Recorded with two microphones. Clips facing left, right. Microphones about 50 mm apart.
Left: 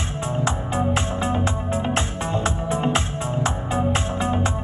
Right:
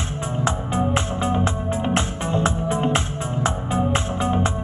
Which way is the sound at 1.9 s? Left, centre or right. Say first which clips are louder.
Right 2 dB; right.